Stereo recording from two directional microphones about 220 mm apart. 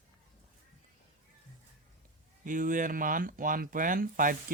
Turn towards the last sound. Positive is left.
turn(degrees=-40)  # may be behind; listen again after turning